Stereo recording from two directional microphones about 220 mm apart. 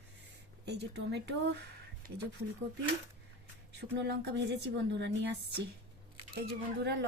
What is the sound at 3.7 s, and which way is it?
Speech, 50° right (ahead or behind).